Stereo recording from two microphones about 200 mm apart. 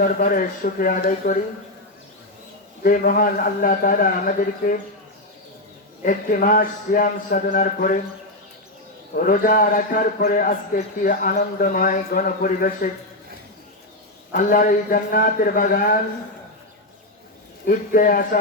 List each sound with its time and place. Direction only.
0.0 s a man's voice: 45° left (ahead or behind)
2.8 s a man's voice: 45° left (ahead or behind)
6.0 s a man's voice: 45° left (ahead or behind)
9.1 s a man's voice: 45° left (ahead or behind)
14.3 s a man's voice: 45° left (ahead or behind)
17.7 s a man's voice: 45° left (ahead or behind)